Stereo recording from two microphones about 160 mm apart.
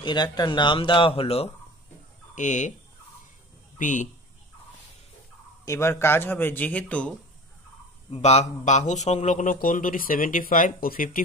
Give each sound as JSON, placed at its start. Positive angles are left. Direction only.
{"t": 0.0, "sound": "speech", "side_deg": 25}
{"t": 2.3, "sound": "speech", "side_deg": 50}
{"t": 3.7, "sound": "speech", "side_deg": 50}
{"t": 5.7, "sound": "speech", "side_deg": 15}
{"t": 8.1, "sound": "a man's voice", "side_deg": 40}